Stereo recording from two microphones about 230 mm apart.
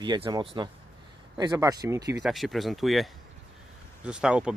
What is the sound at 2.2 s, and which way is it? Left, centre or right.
Speech, centre.